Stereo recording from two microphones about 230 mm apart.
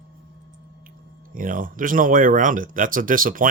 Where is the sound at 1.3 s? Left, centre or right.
Right.